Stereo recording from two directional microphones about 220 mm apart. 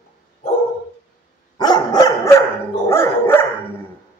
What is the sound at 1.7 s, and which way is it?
Dog, 20° left (ahead or behind).